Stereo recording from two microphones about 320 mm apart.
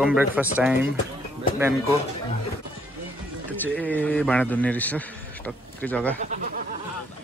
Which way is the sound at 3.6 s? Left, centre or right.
Centre.